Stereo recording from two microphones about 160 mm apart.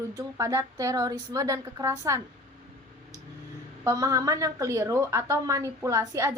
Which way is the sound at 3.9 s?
20° right (ahead or behind).